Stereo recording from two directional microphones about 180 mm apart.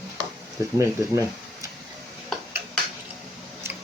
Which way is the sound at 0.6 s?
20° right (ahead or behind).